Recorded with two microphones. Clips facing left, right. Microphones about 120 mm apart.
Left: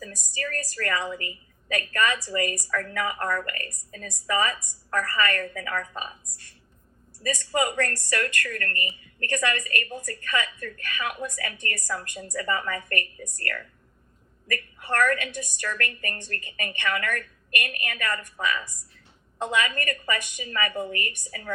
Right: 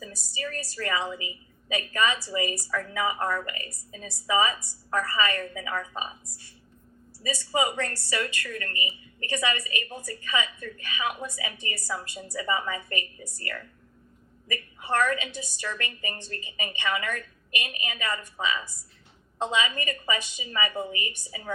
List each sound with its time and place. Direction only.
0.0 s a woman's voice: 15° right (ahead or behind)
14.4 s a woman's voice: 15° right (ahead or behind)
20.9 s a woman's voice: 55° left (ahead or behind)
21.2 s a woman's voice: 15° right (ahead or behind)